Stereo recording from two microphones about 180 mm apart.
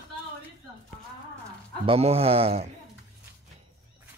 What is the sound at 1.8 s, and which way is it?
Speech, 35° right (ahead or behind).